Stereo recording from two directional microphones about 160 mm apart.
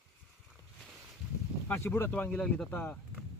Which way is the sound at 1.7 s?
15° left (ahead or behind).